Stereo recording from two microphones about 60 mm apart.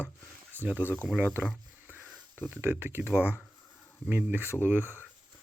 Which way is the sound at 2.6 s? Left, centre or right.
Right.